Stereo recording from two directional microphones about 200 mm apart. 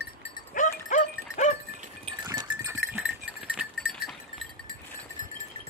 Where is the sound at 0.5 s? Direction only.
40° left (ahead or behind).